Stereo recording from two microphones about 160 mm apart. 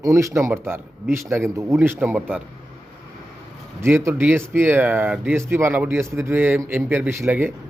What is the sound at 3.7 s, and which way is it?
Speech, 15° right (ahead or behind).